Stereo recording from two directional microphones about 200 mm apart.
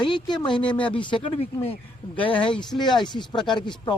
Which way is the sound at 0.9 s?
25° left (ahead or behind).